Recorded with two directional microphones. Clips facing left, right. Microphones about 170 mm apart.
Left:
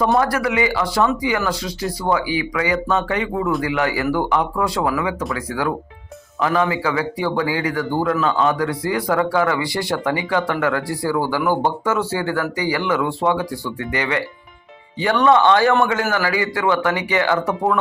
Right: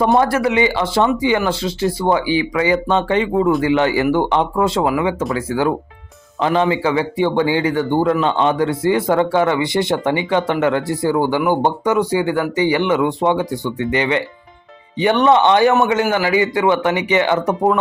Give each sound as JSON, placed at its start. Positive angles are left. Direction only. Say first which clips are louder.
{"t": 0.0, "sound": "speech", "louder": "right 3 dB", "side_deg": -25}